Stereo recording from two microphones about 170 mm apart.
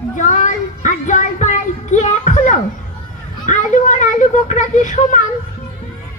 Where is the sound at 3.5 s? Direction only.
45° left (ahead or behind).